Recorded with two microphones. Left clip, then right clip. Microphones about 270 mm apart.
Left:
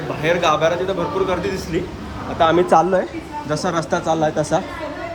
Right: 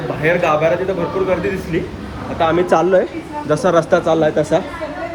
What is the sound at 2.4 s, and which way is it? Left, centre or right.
Speech, left.